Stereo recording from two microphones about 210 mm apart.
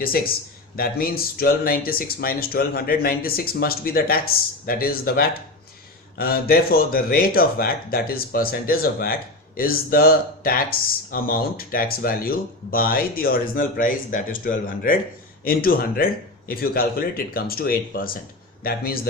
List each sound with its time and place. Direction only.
0.0 s speech: 45° left (ahead or behind)